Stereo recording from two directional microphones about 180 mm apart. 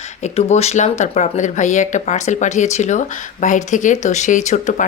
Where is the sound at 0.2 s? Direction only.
35° left (ahead or behind).